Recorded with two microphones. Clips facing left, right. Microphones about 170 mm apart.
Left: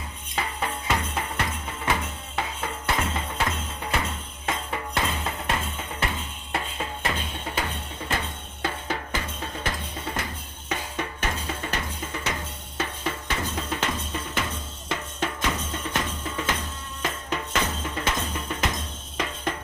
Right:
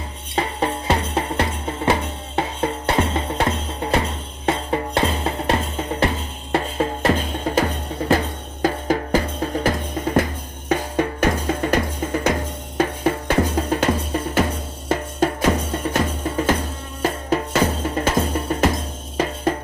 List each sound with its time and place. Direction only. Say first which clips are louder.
0.3 s music: right 8 dB; 35° right (ahead or behind)
8.6 s drum: right 10 dB; 40° right (ahead or behind)
10.7 s music: right 10 dB; 40° right (ahead or behind)